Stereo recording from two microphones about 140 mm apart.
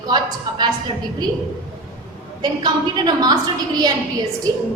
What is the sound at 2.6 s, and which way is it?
A woman's voice, 30° right (ahead or behind).